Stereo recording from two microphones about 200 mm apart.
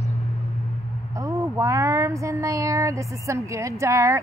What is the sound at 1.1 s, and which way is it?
Speech, 15° right (ahead or behind).